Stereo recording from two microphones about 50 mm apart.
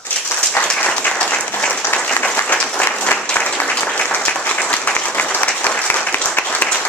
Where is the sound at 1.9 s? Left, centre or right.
Left.